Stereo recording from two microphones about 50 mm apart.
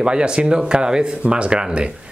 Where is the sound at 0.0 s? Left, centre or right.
Centre.